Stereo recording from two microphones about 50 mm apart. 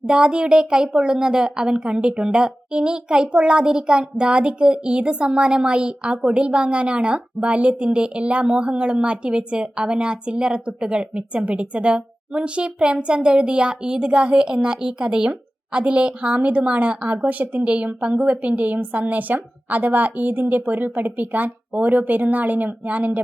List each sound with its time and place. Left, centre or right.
0.0 s a woman's voice: centre